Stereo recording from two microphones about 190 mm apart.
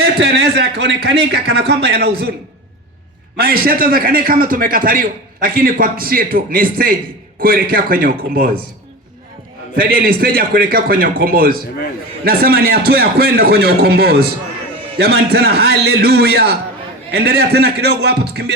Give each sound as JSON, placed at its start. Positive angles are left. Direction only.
{"t": 0.0, "sound": "a man's voice", "side_deg": -60}
{"t": 3.3, "sound": "a man's voice", "side_deg": -50}
{"t": 9.7, "sound": "a man's voice", "side_deg": -50}